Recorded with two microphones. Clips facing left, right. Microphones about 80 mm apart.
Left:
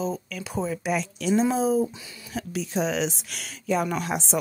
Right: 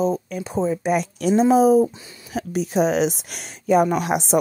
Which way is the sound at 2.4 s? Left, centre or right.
Right.